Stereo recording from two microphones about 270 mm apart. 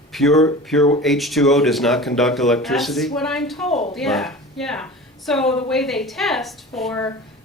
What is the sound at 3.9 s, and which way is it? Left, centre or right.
A woman's voice, centre.